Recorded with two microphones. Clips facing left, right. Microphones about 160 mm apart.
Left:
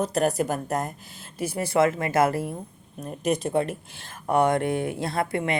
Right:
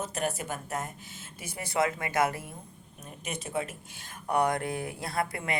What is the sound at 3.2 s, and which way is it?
Speech, 35° left (ahead or behind).